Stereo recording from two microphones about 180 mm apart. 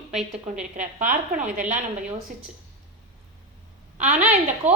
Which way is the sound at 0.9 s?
45° right (ahead or behind).